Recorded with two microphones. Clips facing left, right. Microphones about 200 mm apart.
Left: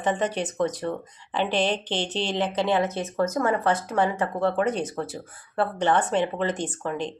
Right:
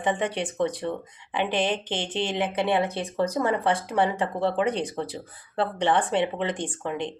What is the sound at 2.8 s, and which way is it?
Speech, 15° right (ahead or behind).